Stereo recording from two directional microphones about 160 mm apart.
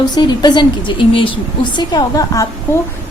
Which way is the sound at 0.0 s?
25° left (ahead or behind).